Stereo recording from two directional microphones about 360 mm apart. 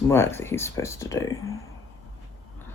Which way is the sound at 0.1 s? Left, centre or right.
Centre.